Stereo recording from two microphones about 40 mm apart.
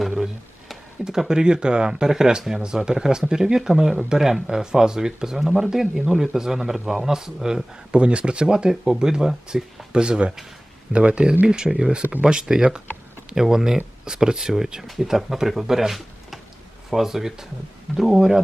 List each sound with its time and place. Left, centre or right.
1.3 s speech: centre
7.9 s speech: right
8.7 s speech: centre